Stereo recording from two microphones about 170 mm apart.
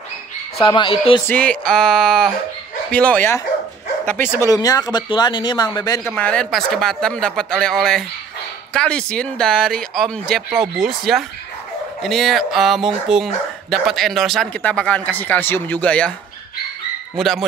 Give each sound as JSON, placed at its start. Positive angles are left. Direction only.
{"t": 0.7, "sound": "speech", "side_deg": 30}
{"t": 1.2, "sound": "speech", "side_deg": 10}
{"t": 17.2, "sound": "speech", "side_deg": 0}